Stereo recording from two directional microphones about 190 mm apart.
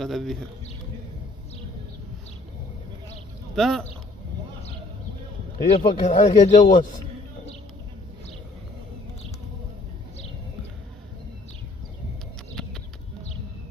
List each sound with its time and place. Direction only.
0.0 s speech: centre (ahead or behind)
3.5 s speech: centre (ahead or behind)
5.7 s speech: 35° left (ahead or behind)